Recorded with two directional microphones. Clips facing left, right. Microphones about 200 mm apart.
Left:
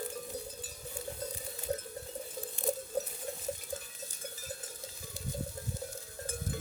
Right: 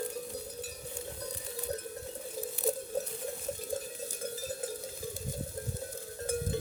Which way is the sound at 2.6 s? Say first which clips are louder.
Right 2 dB; 5° right (ahead or behind).